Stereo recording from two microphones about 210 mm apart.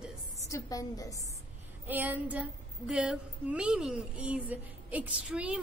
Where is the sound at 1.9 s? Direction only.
10° right (ahead or behind).